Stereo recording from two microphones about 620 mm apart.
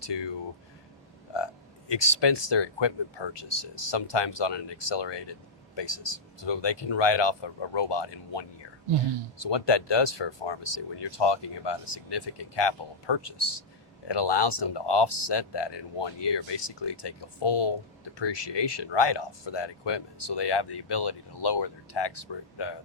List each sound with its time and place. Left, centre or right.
0.1 s speech: left
1.9 s speech: left